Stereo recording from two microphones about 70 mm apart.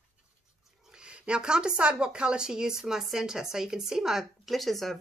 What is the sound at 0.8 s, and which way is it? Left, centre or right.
A woman's voice, centre.